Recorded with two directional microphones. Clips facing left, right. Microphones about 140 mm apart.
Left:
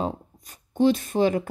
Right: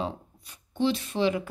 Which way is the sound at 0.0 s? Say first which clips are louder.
Left 4 dB; 45° left (ahead or behind).